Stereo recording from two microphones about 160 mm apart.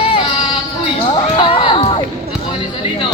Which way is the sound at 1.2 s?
30° left (ahead or behind).